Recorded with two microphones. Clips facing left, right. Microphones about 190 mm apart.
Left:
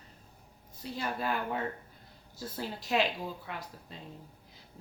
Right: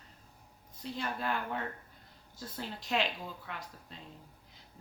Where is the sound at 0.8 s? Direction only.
5° left (ahead or behind).